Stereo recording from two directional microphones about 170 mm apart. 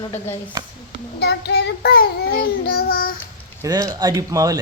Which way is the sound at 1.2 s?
75° left (ahead or behind).